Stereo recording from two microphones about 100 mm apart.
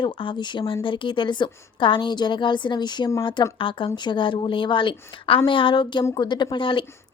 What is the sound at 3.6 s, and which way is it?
A woman's voice, 60° left (ahead or behind).